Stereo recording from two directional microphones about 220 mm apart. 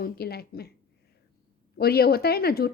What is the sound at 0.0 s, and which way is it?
Speech, 45° left (ahead or behind).